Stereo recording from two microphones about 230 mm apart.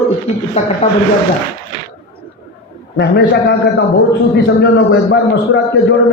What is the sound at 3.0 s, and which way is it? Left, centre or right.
A man's voice, left.